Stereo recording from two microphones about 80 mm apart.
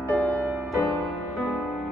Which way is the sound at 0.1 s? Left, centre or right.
Centre.